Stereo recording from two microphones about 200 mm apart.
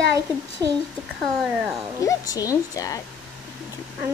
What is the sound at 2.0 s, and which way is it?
Speech, 15° left (ahead or behind).